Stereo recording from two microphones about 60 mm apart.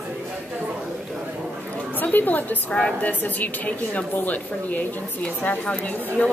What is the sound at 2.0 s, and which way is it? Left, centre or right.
A woman's voice, left.